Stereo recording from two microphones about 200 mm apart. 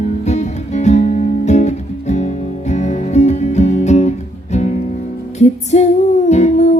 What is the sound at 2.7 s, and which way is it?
Music, 35° left (ahead or behind).